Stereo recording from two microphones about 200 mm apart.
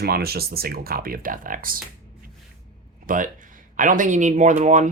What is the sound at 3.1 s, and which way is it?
Speech, 40° right (ahead or behind).